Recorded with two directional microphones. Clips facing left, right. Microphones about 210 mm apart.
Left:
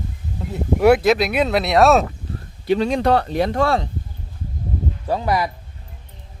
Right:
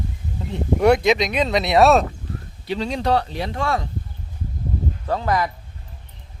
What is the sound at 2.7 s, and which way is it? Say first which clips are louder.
Speech: left 5 dB; 55° left (ahead or behind).